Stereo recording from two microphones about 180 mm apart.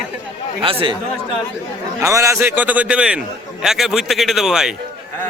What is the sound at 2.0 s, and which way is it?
A man's voice, 15° right (ahead or behind).